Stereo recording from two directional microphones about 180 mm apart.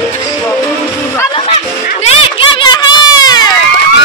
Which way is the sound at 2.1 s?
30° left (ahead or behind).